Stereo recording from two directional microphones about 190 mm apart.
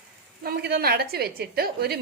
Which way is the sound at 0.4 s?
55° right (ahead or behind).